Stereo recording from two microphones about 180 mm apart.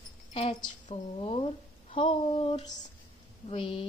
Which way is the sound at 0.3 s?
35° left (ahead or behind).